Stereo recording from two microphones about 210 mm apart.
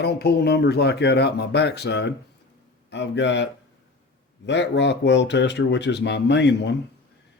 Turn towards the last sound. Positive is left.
turn(degrees=55)  # may be behind; listen again after turning